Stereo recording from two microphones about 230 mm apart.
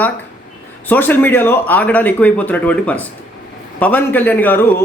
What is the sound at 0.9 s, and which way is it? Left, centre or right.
Speech, centre.